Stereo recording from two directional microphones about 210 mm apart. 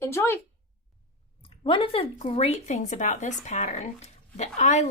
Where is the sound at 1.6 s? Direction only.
25° left (ahead or behind).